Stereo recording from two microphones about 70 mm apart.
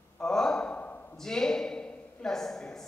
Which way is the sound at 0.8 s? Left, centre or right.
Left.